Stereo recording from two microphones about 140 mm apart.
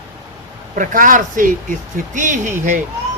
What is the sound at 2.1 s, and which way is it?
Speech, 65° right (ahead or behind).